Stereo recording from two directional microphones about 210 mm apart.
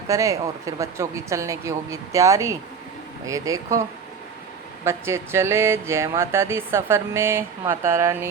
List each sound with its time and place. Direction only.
0.1 s speech: 15° right (ahead or behind)
4.9 s speech: 10° right (ahead or behind)